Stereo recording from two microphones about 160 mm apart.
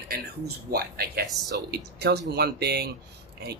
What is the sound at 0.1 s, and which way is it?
Speech, 80° right.